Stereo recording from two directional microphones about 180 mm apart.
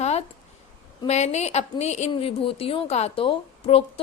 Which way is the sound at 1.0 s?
40° left (ahead or behind).